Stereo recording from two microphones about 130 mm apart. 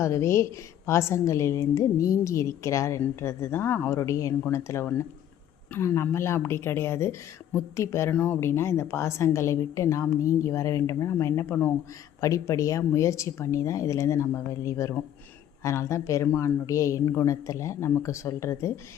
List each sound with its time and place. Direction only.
0.0 s speech: 20° left (ahead or behind)